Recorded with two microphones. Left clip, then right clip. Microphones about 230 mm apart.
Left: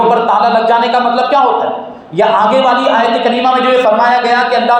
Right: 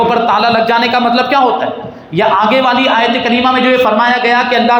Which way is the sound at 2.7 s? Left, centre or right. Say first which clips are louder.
Left 1 dB; right.